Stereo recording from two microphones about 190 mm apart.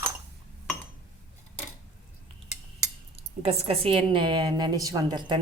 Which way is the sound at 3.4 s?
35° right (ahead or behind).